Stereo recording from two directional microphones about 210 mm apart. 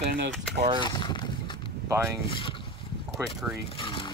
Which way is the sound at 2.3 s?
25° left (ahead or behind).